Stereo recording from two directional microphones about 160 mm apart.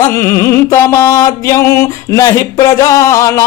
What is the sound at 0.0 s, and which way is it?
Music, 20° left (ahead or behind).